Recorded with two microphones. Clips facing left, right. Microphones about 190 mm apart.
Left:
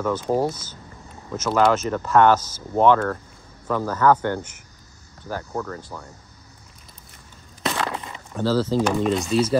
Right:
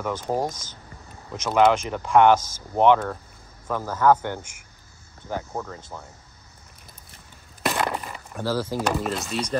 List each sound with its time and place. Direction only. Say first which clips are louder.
0.0 s speech: left 4 dB; 10° right (ahead or behind)
0.5 s speech: left 5 dB; 10° left (ahead or behind)
1.3 s speech: even; 15° right (ahead or behind)
5.8 s speech: left 2 dB; 25° right (ahead or behind)
7.6 s a sound: right 1 dB; 10° right (ahead or behind)
9.1 s speech: left 7 dB; centre (ahead or behind)